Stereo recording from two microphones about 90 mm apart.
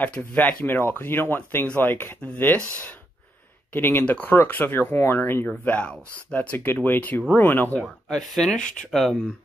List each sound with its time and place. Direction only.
0.0 s speech: 20° left (ahead or behind)
8.1 s speech: 5° left (ahead or behind)